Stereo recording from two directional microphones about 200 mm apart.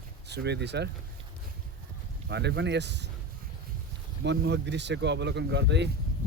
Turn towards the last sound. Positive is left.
turn(degrees=-60)  # may be behind; listen again after turning